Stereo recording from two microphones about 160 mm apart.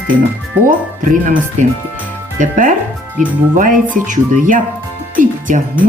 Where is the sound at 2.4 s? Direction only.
55° right (ahead or behind).